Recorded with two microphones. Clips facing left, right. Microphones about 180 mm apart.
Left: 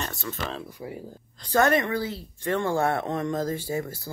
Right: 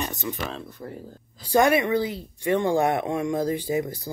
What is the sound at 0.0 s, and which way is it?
Speech, 15° right (ahead or behind).